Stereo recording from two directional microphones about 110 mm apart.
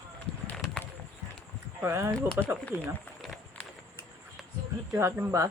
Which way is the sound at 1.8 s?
20° right (ahead or behind).